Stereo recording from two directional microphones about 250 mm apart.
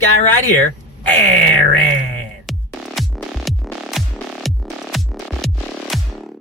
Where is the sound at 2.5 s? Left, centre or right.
Centre.